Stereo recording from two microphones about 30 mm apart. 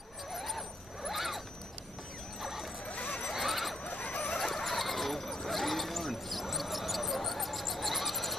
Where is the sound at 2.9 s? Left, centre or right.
Left.